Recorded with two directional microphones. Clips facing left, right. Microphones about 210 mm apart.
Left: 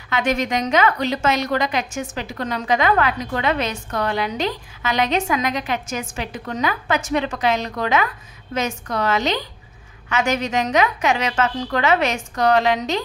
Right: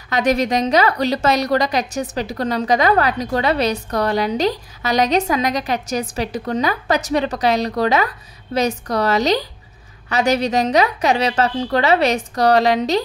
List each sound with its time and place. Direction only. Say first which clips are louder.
0.1 s a woman's voice: right 4 dB; 35° right (ahead or behind)